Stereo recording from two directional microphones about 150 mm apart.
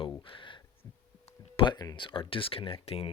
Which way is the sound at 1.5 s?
30° left (ahead or behind).